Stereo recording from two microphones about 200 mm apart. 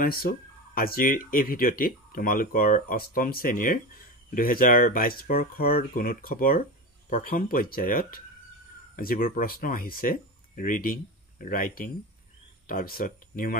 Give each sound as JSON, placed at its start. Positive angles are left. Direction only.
{"t": 0.0, "sound": "speech", "side_deg": 45}